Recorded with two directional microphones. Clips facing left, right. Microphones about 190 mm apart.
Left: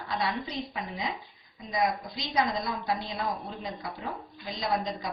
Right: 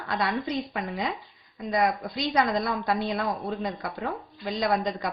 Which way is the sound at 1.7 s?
60° right (ahead or behind).